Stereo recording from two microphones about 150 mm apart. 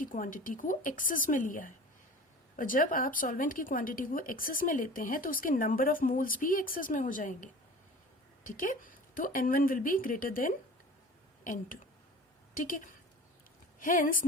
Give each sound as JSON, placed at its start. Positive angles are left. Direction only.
{"t": 0.0, "sound": "a woman's voice", "side_deg": 65}